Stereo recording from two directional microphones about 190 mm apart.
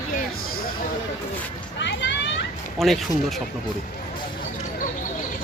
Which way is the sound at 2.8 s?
Centre (ahead or behind).